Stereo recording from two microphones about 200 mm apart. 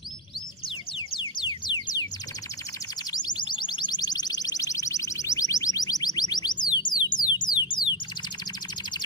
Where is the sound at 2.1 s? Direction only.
20° left (ahead or behind).